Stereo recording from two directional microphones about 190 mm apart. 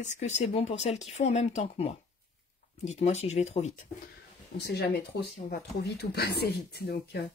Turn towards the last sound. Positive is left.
turn(degrees=55)  # may be behind; listen again after turning